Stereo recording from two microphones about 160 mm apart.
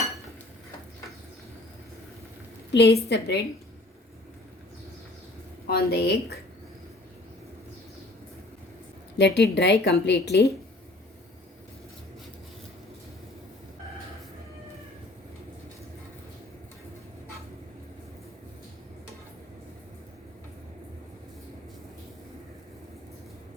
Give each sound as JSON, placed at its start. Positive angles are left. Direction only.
{"t": 2.7, "sound": "a woman's voice", "side_deg": 90}
{"t": 5.6, "sound": "a woman's voice", "side_deg": 80}
{"t": 9.1, "sound": "a woman's voice", "side_deg": 90}